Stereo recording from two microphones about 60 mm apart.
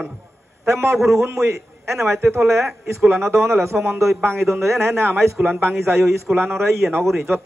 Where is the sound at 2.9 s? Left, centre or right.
Right.